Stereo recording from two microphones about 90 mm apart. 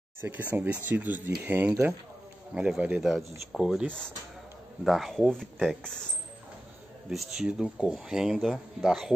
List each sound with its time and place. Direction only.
0.2 s speech: 20° right (ahead or behind)
2.5 s speech: 10° right (ahead or behind)
3.0 s speech: centre (ahead or behind)
4.8 s speech: centre (ahead or behind)
7.1 s speech: centre (ahead or behind)